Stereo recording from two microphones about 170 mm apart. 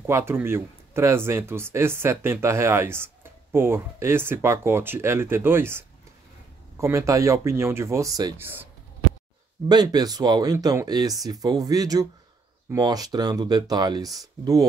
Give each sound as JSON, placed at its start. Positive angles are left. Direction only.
{"t": 0.0, "sound": "speech", "side_deg": -15}
{"t": 9.7, "sound": "speech", "side_deg": -25}